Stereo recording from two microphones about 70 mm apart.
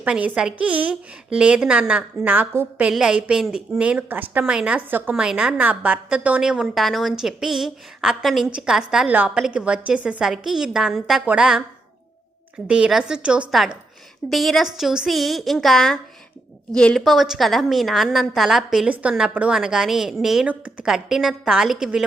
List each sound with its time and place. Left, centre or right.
0.0 s a woman's voice: centre
2.9 s a woman's voice: centre
4.9 s a woman's voice: right
5.1 s a woman's voice: centre
6.4 s a woman's voice: centre
9.0 s a woman's voice: right
12.6 s a woman's voice: centre
14.3 s a woman's voice: centre
17.0 s a woman's voice: centre
19.3 s a woman's voice: right
19.5 s a woman's voice: centre
20.4 s a woman's voice: centre
20.8 s a woman's voice: centre